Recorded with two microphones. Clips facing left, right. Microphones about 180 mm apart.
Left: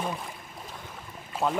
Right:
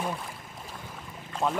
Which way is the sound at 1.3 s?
5° left (ahead or behind).